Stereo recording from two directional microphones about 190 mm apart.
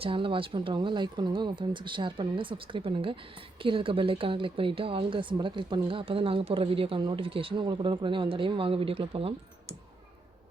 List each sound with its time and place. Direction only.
0.0 s speech: 25° right (ahead or behind)